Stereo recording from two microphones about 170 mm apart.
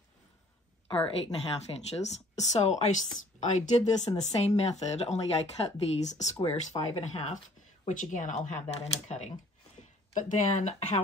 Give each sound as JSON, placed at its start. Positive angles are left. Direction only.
{"t": 0.8, "sound": "speech", "side_deg": 35}